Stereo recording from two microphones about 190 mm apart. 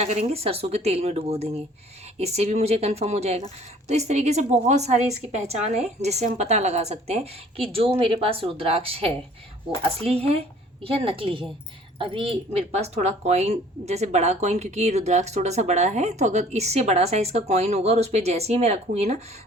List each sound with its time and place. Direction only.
0.0 s a woman's voice: 35° right (ahead or behind)